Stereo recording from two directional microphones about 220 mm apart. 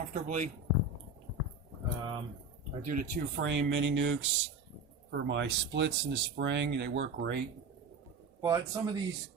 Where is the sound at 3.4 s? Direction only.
60° right (ahead or behind).